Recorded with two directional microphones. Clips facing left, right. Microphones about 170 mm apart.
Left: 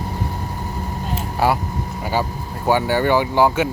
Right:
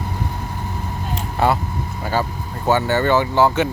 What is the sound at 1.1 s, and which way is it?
Vehicle, 5° left (ahead or behind).